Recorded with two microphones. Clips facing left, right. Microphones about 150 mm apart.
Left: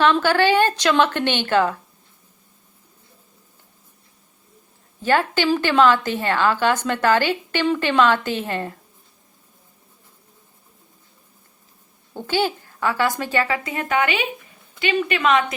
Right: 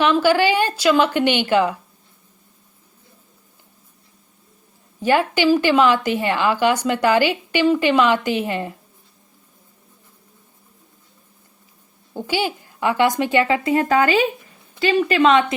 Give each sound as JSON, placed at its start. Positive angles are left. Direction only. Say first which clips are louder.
{"t": 0.0, "sound": "a woman's voice", "louder": "right 1 dB", "side_deg": -10}
{"t": 5.0, "sound": "a woman's voice", "louder": "right 3 dB", "side_deg": -15}
{"t": 12.1, "sound": "a woman's voice", "louder": "left 1 dB", "side_deg": -10}